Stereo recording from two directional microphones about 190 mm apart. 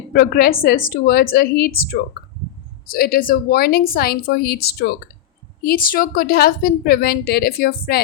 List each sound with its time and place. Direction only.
0.1 s a woman's voice: 55° left (ahead or behind)